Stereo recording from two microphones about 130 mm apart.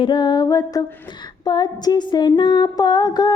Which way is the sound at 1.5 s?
35° left (ahead or behind).